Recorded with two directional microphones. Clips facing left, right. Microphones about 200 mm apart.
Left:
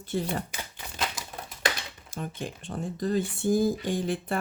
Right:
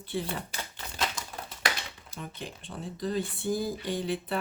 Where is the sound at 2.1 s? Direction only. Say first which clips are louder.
Left 7 dB; 50° left (ahead or behind).